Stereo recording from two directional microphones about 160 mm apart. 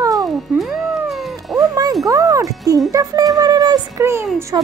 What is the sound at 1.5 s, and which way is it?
Music, 25° right (ahead or behind).